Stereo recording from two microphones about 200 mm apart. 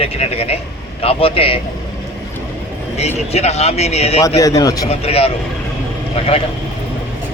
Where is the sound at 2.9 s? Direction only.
30° left (ahead or behind).